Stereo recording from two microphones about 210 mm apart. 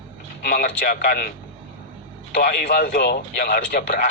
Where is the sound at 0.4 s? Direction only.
50° left (ahead or behind).